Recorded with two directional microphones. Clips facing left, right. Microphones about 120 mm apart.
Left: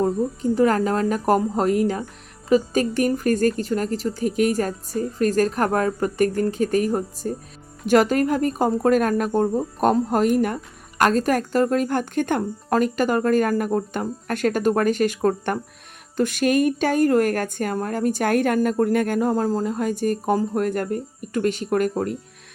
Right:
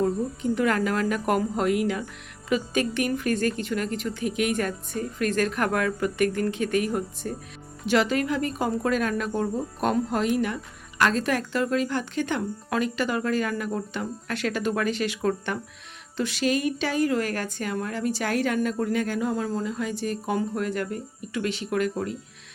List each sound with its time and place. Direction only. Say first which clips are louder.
0.5 s speech: left 5 dB; 35° left (ahead or behind)